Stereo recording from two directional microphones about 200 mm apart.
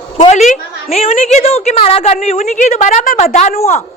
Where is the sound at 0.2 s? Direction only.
35° left (ahead or behind).